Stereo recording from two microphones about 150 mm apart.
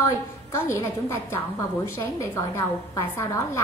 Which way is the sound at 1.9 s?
15° left (ahead or behind).